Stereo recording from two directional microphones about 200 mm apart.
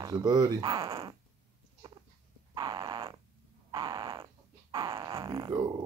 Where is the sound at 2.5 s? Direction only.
20° right (ahead or behind).